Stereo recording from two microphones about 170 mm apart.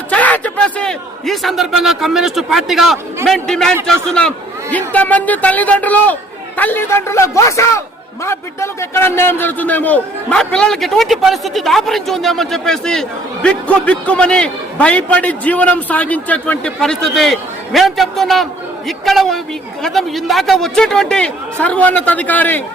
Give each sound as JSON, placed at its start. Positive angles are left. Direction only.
{"t": 0.1, "sound": "a man's voice", "side_deg": 10}